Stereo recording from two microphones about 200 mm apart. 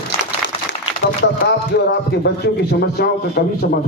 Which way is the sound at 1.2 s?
65° left (ahead or behind).